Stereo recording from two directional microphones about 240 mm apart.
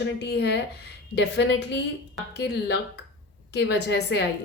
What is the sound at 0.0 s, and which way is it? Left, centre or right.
A woman's voice, left.